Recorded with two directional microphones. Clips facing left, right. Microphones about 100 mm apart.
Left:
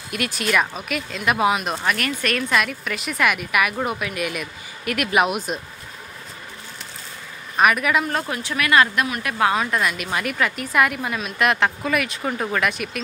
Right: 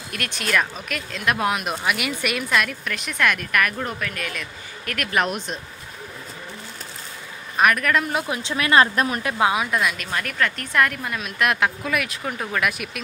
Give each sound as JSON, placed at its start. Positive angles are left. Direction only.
{"t": 0.1, "sound": "a woman's voice", "side_deg": 5}
{"t": 7.5, "sound": "a woman's voice", "side_deg": 5}
{"t": 8.1, "sound": "speech", "side_deg": -10}
{"t": 8.4, "sound": "a woman's voice", "side_deg": -25}
{"t": 9.4, "sound": "speech", "side_deg": -10}
{"t": 9.7, "sound": "a woman's voice", "side_deg": 0}